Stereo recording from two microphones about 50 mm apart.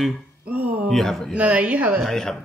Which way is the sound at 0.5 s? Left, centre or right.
Right.